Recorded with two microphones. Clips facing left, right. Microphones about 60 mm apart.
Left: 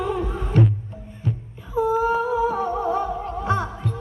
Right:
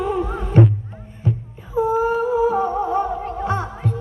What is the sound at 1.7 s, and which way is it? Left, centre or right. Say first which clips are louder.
Humming: right 2 dB; right.